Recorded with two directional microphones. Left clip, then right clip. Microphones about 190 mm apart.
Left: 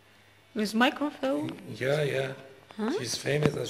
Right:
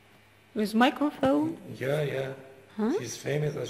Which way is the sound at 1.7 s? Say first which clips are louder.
Left 2 dB; 30° left (ahead or behind).